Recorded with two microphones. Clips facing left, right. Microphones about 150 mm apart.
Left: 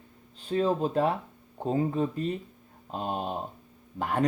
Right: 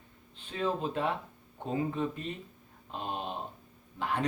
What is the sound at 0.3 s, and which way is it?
Speech, 40° left (ahead or behind).